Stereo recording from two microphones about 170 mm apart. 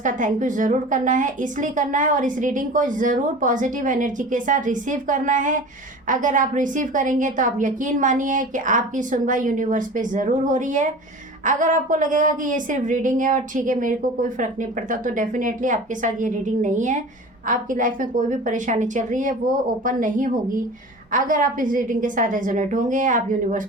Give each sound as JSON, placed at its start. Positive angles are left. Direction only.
{"t": 0.0, "sound": "a woman's voice", "side_deg": -50}